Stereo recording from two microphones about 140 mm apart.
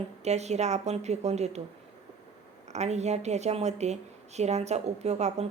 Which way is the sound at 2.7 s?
55° right (ahead or behind).